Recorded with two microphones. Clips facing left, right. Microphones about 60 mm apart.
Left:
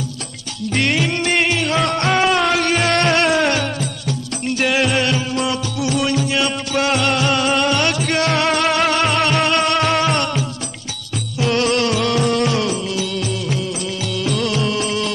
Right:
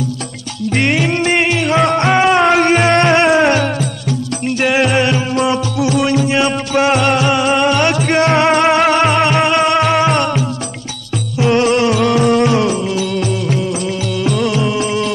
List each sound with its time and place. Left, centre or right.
0.7 s music: centre
6.0 s music: right; by 7.8 s centre
8.1 s music: right
13.0 s music of bollywood: right
13.3 s music of bollywood: right
14.3 s music: centre